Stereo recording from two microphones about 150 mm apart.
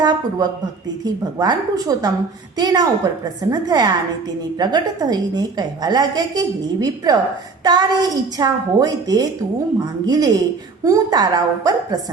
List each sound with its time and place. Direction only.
0.0 s a woman's voice: 30° right (ahead or behind)